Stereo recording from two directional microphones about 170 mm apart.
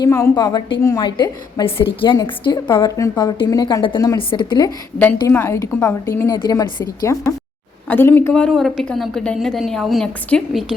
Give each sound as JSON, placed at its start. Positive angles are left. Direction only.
{"t": 0.0, "sound": "a woman's voice", "side_deg": 20}
{"t": 5.3, "sound": "a woman's voice", "side_deg": 15}